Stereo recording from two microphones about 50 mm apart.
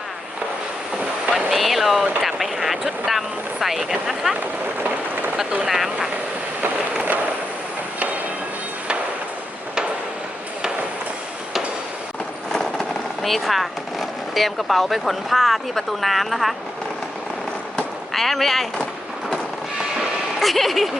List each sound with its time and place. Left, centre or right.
1.5 s a sound: centre
2.2 s speech: centre
4.4 s speech: right
5.6 s speech: centre
13.2 s speech: centre
18.1 s speech: centre
20.0 s vehicle: centre